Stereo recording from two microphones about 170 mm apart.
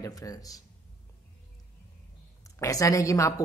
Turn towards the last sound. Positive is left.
turn(degrees=20)  # may be behind; listen again after turning